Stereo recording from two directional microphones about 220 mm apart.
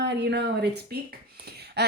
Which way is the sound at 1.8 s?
50° right (ahead or behind).